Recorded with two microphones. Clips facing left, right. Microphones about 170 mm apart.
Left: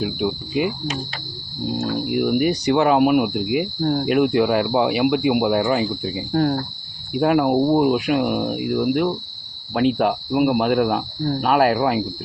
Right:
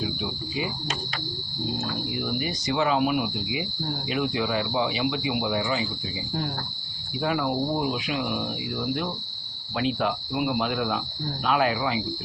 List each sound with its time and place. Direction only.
0.0 s speech: 60° left (ahead or behind)
2.0 s speech: 60° left (ahead or behind)